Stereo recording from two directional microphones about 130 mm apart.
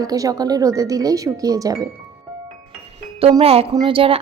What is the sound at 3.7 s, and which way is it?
Speech, 40° right (ahead or behind).